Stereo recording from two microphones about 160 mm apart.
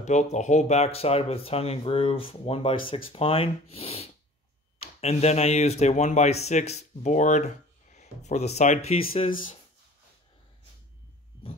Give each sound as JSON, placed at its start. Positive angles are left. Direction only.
{"t": 0.0, "sound": "speech", "side_deg": 45}